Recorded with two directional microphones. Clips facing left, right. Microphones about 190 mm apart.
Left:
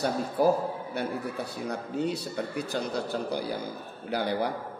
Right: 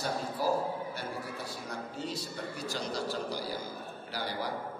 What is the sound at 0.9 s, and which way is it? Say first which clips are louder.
A man's voice: left 7 dB; 60° left (ahead or behind).